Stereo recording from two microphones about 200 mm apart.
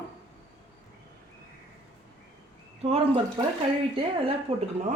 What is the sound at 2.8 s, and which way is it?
Speech, 30° right (ahead or behind).